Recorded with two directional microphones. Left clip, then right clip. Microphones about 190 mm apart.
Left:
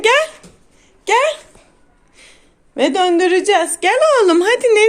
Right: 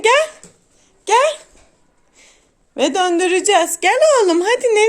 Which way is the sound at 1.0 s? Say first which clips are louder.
Even; 20° right (ahead or behind).